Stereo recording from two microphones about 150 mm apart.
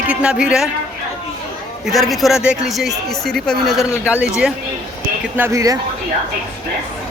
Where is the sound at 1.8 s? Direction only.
Centre (ahead or behind).